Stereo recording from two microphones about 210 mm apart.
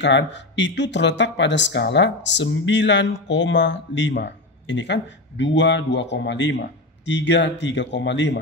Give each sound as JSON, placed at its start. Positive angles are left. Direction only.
{"t": 0.0, "sound": "speech", "side_deg": 60}